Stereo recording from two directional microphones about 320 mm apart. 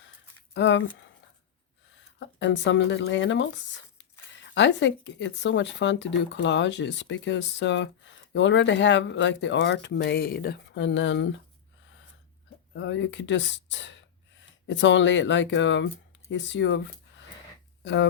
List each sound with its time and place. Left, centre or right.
0.5 s speech: left
2.1 s speech: left
12.7 s speech: left
17.8 s speech: left